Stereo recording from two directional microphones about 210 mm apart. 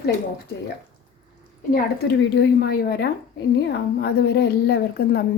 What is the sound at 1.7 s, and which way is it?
A woman's voice, 50° left (ahead or behind).